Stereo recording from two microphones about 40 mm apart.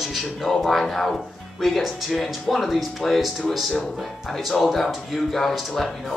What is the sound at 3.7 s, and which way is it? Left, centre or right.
Speech, centre.